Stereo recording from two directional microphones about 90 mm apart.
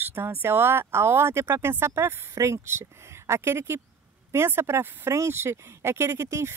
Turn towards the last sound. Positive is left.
turn(degrees=-30)  # may be behind; listen again after turning